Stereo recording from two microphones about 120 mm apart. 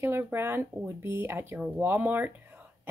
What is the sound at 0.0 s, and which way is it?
Speech, 20° right (ahead or behind).